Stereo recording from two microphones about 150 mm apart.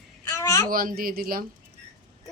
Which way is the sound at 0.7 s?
75° right (ahead or behind).